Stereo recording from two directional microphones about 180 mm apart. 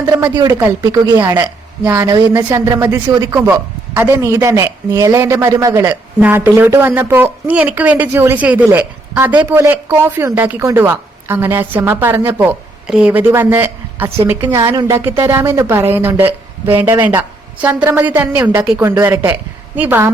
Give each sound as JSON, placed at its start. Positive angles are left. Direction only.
{"t": 0.3, "sound": "a woman's voice", "side_deg": -20}
{"t": 14.6, "sound": "a woman's voice", "side_deg": -25}